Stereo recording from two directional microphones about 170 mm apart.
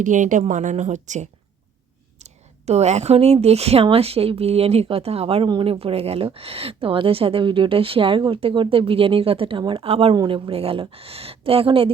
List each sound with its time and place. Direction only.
0.0 s a woman's voice: 50° right (ahead or behind); by 11.9 s 35° right (ahead or behind)